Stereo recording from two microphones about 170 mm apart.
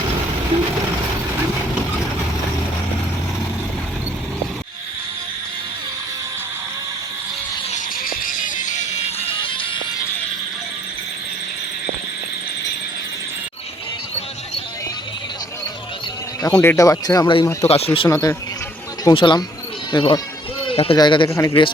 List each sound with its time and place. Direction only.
8.0 s music: 55° left (ahead or behind); by 9.6 s 30° left (ahead or behind)
16.4 s speech: 10° left (ahead or behind)
17.7 s speech: 35° left (ahead or behind)
18.1 s speech: 20° left (ahead or behind)
20.7 s a sound: 35° left (ahead or behind)
20.9 s speech: 25° left (ahead or behind)
21.2 s speech: 15° left (ahead or behind)